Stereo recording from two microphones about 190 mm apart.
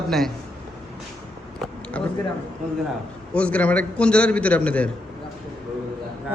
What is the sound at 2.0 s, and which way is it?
Speech, 5° left (ahead or behind).